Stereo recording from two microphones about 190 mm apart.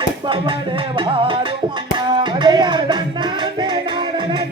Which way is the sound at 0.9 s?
25° right (ahead or behind).